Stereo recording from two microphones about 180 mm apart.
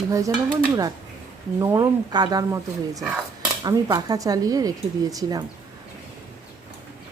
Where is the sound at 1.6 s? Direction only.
20° right (ahead or behind).